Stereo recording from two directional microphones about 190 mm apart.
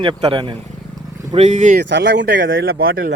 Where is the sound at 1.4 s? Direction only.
40° right (ahead or behind).